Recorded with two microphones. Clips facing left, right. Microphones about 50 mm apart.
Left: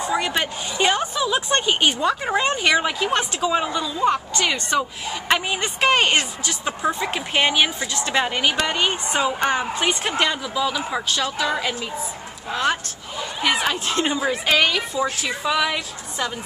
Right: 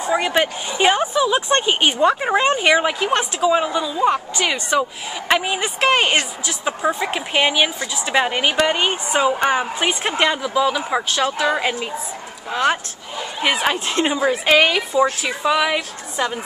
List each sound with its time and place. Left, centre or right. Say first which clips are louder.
0.0 s a woman's voice: right 4 dB; centre